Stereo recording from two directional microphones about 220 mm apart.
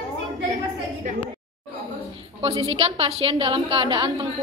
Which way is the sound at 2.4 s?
25° right (ahead or behind).